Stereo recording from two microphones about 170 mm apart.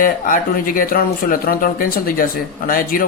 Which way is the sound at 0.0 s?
55° left (ahead or behind).